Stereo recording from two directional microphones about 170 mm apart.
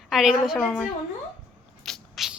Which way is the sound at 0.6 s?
10° left (ahead or behind).